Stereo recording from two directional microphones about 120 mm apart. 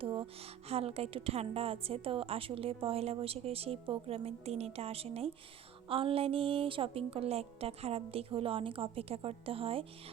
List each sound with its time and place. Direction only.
0.0 s a woman's voice: 50° right (ahead or behind)